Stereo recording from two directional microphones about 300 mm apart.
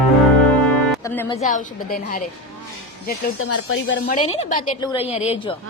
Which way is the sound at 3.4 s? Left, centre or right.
Left.